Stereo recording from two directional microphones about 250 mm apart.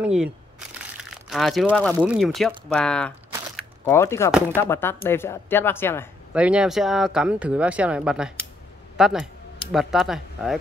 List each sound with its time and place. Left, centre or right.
0.0 s speech: centre
1.3 s speech: centre
3.5 s biting: centre
4.6 s speech: centre
6.3 s speech: centre